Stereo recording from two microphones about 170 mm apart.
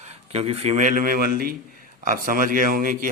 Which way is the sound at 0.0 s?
35° right (ahead or behind).